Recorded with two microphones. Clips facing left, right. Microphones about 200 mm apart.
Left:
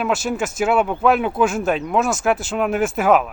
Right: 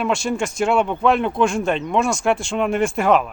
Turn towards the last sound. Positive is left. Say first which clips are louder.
# left 1 dB
turn(degrees=5)  # may be behind; listen again after turning